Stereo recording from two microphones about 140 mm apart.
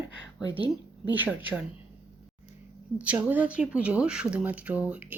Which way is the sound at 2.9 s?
10° right (ahead or behind).